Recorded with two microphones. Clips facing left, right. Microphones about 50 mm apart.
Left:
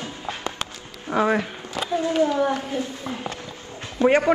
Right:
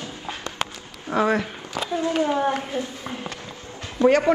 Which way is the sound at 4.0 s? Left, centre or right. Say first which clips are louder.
Right 1 dB; left.